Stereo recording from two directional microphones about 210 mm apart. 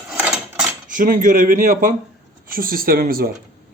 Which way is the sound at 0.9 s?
40° right (ahead or behind).